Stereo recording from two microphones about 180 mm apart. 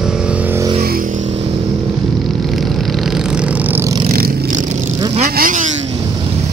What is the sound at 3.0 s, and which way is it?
Vehicle, 5° right (ahead or behind).